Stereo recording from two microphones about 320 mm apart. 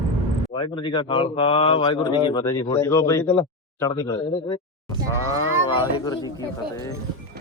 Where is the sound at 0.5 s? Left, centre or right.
Centre.